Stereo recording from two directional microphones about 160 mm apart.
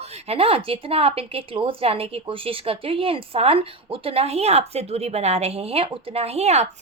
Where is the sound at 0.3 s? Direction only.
35° right (ahead or behind).